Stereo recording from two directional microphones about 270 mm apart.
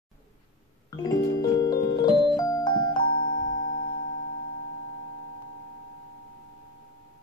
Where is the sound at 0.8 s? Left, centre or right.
Centre.